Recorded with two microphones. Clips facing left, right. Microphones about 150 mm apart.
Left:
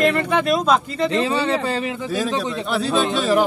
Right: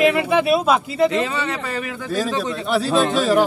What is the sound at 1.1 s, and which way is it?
Speech, 30° left (ahead or behind).